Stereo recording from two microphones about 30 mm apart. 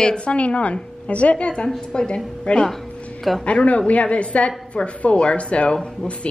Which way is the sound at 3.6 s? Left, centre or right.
Left.